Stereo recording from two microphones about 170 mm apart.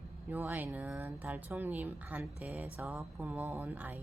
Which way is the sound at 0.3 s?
10° right (ahead or behind).